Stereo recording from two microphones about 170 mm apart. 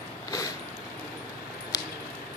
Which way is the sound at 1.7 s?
20° left (ahead or behind).